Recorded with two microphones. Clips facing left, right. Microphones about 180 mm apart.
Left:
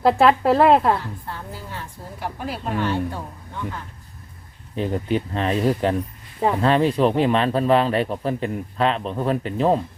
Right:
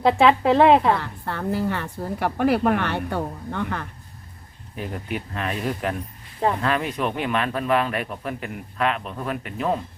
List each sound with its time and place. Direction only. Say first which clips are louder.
0.0 s a woman's voice: left 1 dB; centre (ahead or behind)
0.9 s speech: right 2 dB; 65° right (ahead or behind)
4.7 s a man's voice: left 7 dB; 30° left (ahead or behind)